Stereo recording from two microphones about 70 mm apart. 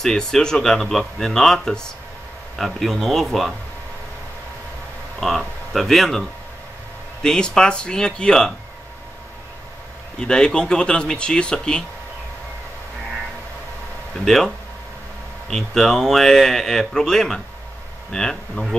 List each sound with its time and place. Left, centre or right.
0.0 s speech: centre
5.7 s speech: centre
7.2 s speech: centre
10.2 s speech: centre
14.2 s speech: centre
15.5 s speech: centre